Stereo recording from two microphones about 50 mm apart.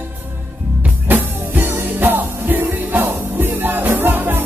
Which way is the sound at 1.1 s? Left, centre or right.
Right.